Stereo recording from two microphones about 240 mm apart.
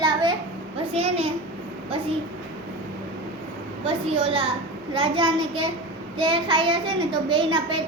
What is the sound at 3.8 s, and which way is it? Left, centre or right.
A child's voice, right.